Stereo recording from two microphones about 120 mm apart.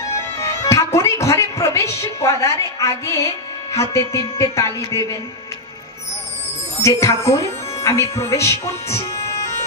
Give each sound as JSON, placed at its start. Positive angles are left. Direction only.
{"t": 0.4, "sound": "speech", "side_deg": 25}
{"t": 6.8, "sound": "speech", "side_deg": 25}